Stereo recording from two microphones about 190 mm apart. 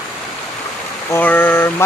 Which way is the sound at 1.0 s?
10° left (ahead or behind).